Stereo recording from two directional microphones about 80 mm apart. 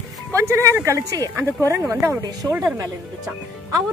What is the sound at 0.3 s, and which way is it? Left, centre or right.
Speech, right.